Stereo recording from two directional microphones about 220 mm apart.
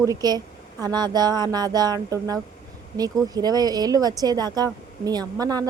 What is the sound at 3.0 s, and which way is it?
Speech, 15° right (ahead or behind).